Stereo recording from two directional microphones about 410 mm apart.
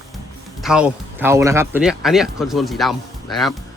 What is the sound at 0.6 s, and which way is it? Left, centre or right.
Speech, centre.